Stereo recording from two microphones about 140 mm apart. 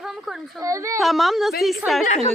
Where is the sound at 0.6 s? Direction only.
20° right (ahead or behind).